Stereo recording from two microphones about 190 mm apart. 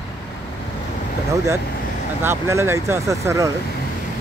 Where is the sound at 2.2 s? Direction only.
15° right (ahead or behind).